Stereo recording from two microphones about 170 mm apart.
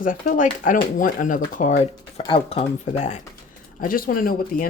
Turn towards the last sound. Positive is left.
turn(degrees=55)  # may be behind; listen again after turning